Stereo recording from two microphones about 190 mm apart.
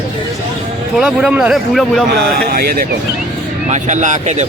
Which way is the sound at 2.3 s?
50° right (ahead or behind).